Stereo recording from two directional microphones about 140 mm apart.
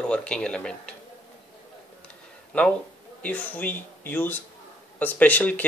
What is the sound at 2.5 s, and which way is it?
Speech, 10° left (ahead or behind).